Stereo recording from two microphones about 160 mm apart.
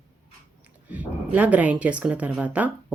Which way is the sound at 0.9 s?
10° right (ahead or behind).